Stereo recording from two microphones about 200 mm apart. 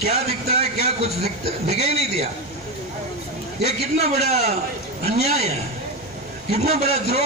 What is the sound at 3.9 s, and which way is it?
A man's voice, 35° right (ahead or behind).